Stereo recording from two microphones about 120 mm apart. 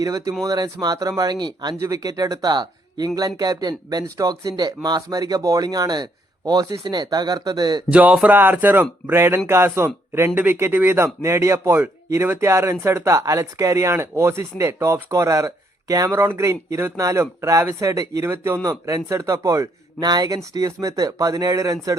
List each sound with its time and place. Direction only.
0.0 s speech: 30° right (ahead or behind)
7.9 s speech: 10° right (ahead or behind); by 21.9 s 25° right (ahead or behind)